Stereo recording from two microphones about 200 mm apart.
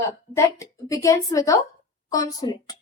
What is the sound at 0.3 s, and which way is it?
Speech, 15° left (ahead or behind).